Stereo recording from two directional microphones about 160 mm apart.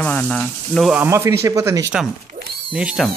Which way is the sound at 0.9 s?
15° right (ahead or behind).